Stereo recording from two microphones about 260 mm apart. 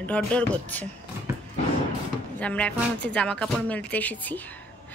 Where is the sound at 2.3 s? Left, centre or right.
Centre.